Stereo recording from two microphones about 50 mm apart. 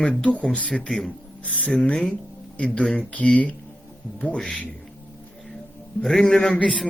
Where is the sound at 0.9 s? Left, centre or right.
Centre.